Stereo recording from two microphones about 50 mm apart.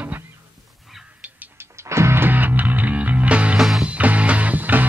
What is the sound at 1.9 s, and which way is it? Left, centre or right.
Music, right.